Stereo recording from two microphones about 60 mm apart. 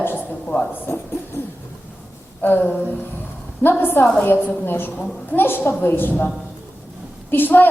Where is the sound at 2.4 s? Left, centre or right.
Left.